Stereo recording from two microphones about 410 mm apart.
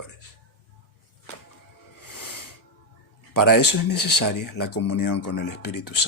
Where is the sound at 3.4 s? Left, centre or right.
Left.